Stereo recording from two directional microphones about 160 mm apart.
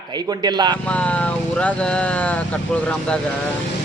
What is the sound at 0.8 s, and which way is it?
Speech, 10° left (ahead or behind).